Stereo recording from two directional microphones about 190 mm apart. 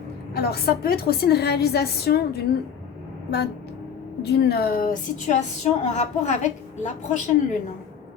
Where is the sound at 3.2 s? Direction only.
60° left (ahead or behind).